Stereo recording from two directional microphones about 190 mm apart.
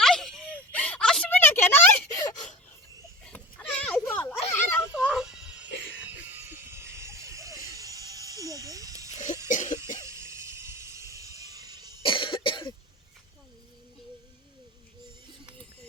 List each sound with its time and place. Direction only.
0.0 s a sound: centre (ahead or behind)
4.5 s children playing: 10° left (ahead or behind)
4.9 s music: 5° right (ahead or behind)
9.1 s cough: 40° left (ahead or behind)
10.1 s music: 15° right (ahead or behind)
12.0 s cough: 25° left (ahead or behind)